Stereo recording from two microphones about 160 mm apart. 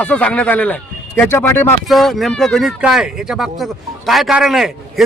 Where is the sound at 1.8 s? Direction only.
Centre (ahead or behind).